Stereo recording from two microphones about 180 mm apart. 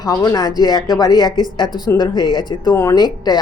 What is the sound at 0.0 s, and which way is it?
A woman's voice, 20° left (ahead or behind).